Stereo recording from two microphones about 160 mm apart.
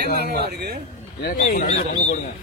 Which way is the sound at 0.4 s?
85° right.